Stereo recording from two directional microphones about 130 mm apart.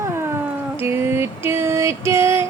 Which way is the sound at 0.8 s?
15° right (ahead or behind).